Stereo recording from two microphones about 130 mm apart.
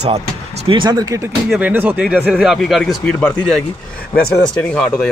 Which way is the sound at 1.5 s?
10° right (ahead or behind).